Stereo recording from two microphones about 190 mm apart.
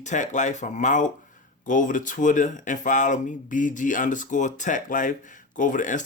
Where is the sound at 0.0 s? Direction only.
40° left (ahead or behind).